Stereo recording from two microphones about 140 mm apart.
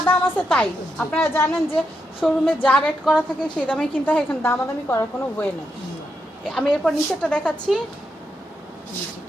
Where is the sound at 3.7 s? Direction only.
10° left (ahead or behind).